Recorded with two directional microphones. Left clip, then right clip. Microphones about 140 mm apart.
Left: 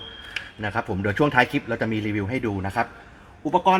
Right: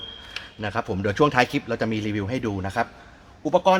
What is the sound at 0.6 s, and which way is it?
A man's voice, 20° right (ahead or behind).